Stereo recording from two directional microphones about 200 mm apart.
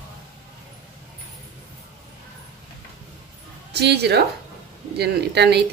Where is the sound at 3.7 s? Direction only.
55° right (ahead or behind).